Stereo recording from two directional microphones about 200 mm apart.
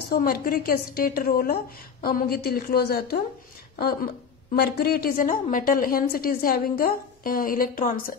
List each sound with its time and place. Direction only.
0.1 s a woman's voice: 45° left (ahead or behind)